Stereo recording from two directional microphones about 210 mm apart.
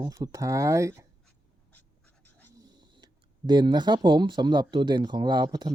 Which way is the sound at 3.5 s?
20° right (ahead or behind).